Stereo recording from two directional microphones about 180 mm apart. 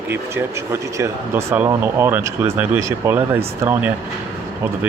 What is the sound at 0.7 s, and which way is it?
Speech, 15° right (ahead or behind).